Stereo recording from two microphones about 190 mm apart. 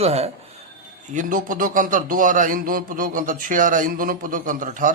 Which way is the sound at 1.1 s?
45° right (ahead or behind).